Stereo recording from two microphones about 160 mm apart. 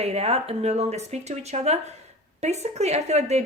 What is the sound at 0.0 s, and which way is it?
A woman's voice, 40° right (ahead or behind).